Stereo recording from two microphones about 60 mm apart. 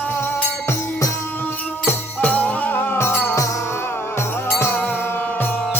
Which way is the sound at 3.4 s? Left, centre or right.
Left.